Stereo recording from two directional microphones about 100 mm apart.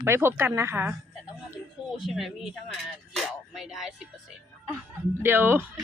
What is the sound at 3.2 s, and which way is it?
Music, centre (ahead or behind).